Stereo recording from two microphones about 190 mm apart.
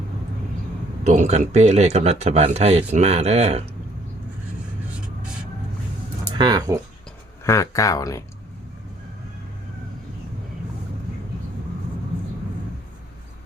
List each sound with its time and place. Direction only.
1.0 s speech: 40° right (ahead or behind)
6.3 s speech: 20° right (ahead or behind)
7.4 s speech: 15° left (ahead or behind)